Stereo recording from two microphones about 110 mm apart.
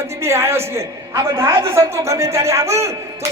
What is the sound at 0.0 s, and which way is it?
A woman's voice, 25° right (ahead or behind).